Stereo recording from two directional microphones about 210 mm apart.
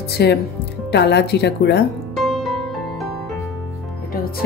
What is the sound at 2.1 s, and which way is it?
Music, centre (ahead or behind).